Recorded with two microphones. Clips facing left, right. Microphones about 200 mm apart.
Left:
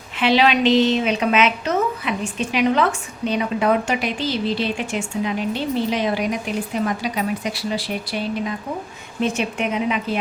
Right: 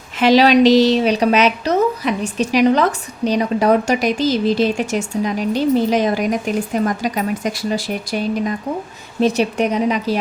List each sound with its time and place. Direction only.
0.2 s a woman's voice: 40° right (ahead or behind)